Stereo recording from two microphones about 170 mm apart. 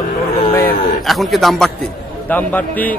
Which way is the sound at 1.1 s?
Centre (ahead or behind).